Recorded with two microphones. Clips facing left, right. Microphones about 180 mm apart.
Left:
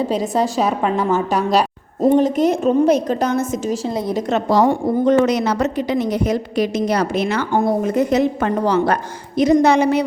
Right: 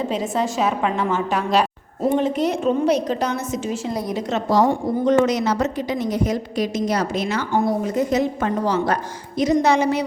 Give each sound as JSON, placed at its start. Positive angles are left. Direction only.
{"t": 0.1, "sound": "a woman's voice", "side_deg": 35}
{"t": 4.3, "sound": "a woman's voice", "side_deg": 60}